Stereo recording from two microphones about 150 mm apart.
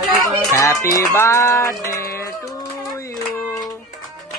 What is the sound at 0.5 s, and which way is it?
Speech, 20° left (ahead or behind).